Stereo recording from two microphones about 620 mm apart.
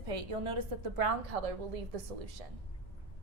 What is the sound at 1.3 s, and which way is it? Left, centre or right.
Speech, right.